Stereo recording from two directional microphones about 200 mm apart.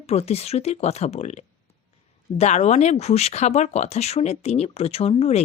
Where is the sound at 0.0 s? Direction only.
30° left (ahead or behind).